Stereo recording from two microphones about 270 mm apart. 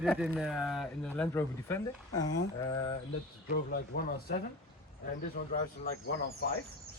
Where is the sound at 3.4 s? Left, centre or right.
Left.